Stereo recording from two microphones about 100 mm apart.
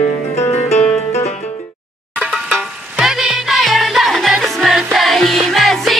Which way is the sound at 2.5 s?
5° right (ahead or behind).